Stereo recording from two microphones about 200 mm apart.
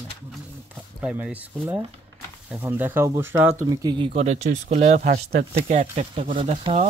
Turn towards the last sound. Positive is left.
turn(degrees=-30)  # may be behind; listen again after turning